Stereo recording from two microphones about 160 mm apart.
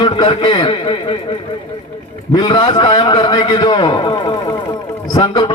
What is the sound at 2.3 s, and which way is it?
A man's voice, 25° left (ahead or behind).